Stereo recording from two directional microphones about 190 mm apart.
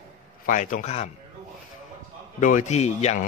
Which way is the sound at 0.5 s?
45° left (ahead or behind).